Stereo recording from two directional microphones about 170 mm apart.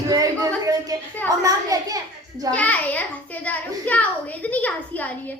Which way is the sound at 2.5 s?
10° left (ahead or behind).